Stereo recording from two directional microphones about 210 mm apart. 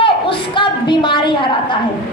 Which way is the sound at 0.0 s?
25° left (ahead or behind).